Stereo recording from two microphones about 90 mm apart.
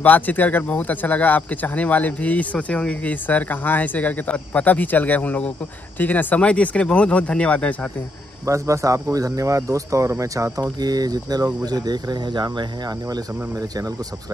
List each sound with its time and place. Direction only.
0.0 s speech: 20° left (ahead or behind)
8.5 s speech: 35° right (ahead or behind)